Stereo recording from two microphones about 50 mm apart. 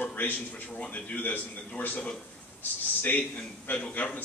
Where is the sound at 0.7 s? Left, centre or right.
Left.